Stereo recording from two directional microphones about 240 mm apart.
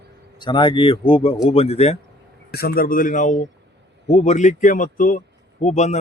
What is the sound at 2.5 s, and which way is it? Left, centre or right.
A man's voice, left.